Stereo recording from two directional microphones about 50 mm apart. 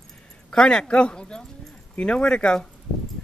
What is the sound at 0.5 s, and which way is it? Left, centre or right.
Speech, centre.